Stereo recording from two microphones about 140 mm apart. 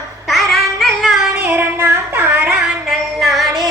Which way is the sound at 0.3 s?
Centre (ahead or behind).